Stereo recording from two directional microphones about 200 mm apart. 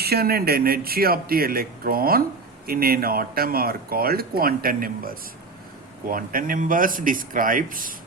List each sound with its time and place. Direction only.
0.0 s speech: 50° right (ahead or behind)